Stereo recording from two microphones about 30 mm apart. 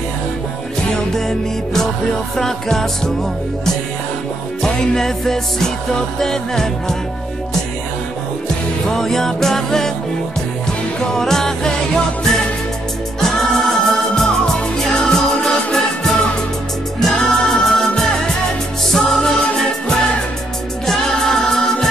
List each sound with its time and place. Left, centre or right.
1.1 s music: centre
4.6 s music: centre
8.9 s music: centre
11.1 s music: centre
13.2 s music: centre
14.1 s music: left
17.0 s music: centre
20.8 s music: centre